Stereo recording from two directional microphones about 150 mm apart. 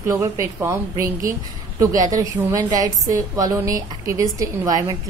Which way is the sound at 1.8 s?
25° right (ahead or behind).